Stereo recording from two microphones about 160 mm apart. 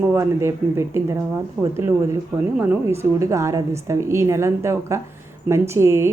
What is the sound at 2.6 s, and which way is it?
A woman's voice, 15° right (ahead or behind).